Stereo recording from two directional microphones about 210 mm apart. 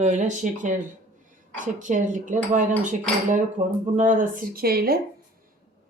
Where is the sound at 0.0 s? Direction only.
35° right (ahead or behind).